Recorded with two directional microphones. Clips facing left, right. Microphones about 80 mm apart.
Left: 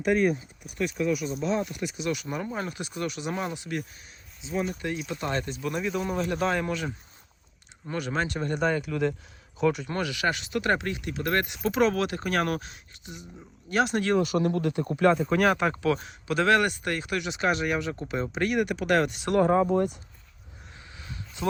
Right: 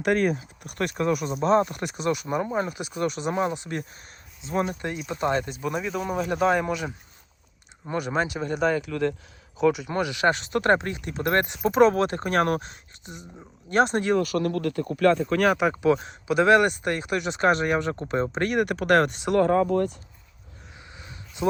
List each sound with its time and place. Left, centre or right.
0.0 s speech: right
0.9 s speech: right
2.2 s speech: right
3.0 s speech: right
4.5 s speech: right
5.0 s speech: right
5.6 s speech: centre
9.9 s speech: right
14.2 s speech: left
15.1 s speech: centre
15.7 s speech: right
17.3 s speech: right
19.4 s speech: centre
20.9 s a sound: right